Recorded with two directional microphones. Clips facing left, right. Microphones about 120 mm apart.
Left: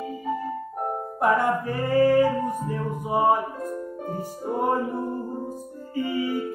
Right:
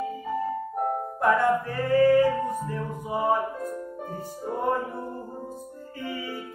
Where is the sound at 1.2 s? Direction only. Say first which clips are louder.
Even; 15° left (ahead or behind).